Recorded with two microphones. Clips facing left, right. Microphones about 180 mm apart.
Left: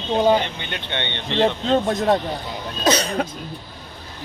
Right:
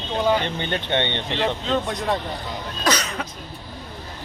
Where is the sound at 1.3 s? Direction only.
30° left (ahead or behind).